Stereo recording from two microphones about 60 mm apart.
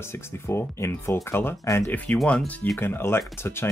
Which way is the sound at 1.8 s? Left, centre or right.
Left.